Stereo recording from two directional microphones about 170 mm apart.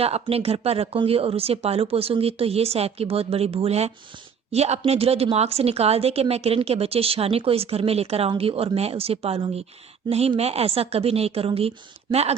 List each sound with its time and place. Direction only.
0.0 s a woman's voice: 35° right (ahead or behind)